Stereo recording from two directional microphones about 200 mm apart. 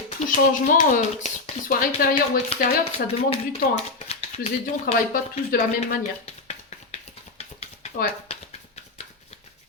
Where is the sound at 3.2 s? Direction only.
30° left (ahead or behind).